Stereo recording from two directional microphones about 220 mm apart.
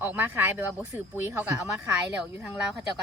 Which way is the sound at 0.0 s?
10° right (ahead or behind).